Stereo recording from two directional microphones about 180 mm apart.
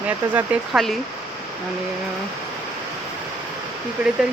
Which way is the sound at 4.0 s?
5° right (ahead or behind).